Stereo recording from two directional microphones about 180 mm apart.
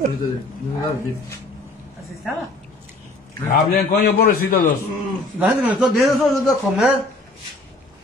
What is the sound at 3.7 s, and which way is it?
Speech, 55° left (ahead or behind).